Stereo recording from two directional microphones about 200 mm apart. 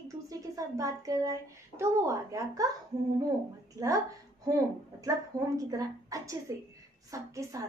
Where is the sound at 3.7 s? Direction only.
15° right (ahead or behind).